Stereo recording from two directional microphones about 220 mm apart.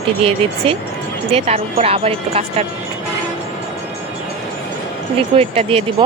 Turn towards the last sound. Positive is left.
turn(degrees=-25)  # may be behind; listen again after turning